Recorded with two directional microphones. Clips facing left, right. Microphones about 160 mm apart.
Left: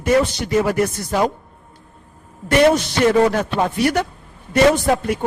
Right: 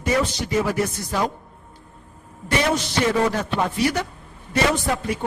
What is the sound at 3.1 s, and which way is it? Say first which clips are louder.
Speech: left 7 dB; 55° left (ahead or behind).